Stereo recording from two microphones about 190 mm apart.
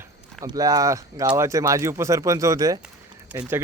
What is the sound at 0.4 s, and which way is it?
Speech, 20° right (ahead or behind).